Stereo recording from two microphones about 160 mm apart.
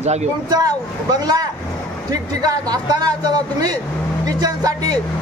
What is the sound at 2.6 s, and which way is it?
A man's voice, 25° right (ahead or behind).